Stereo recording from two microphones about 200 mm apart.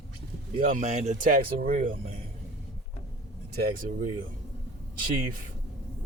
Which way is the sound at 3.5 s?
50° right (ahead or behind).